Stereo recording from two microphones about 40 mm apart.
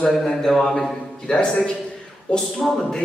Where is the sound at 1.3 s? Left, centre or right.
Left.